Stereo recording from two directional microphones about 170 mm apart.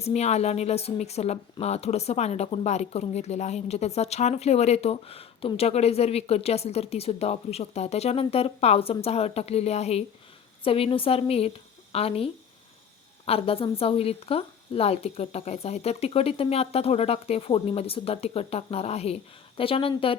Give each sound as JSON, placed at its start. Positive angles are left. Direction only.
{"t": 0.0, "sound": "a woman's voice", "side_deg": 40}